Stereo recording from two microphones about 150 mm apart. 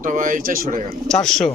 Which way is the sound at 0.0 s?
60° right (ahead or behind).